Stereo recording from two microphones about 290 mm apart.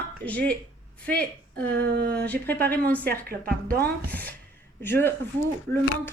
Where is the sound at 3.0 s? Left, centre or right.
Right.